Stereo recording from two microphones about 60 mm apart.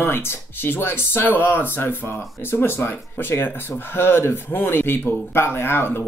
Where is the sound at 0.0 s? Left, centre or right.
Left.